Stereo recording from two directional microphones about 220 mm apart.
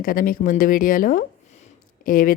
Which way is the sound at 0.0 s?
40° left (ahead or behind).